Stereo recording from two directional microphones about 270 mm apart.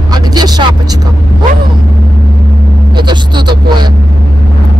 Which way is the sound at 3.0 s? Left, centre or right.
Centre.